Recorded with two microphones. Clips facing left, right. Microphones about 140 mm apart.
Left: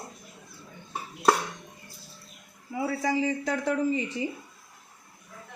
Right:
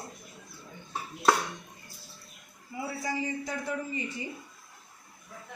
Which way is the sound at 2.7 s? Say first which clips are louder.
Left 7 dB; 90° left.